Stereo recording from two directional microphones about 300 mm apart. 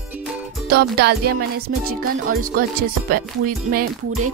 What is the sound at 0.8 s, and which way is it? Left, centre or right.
Music, right.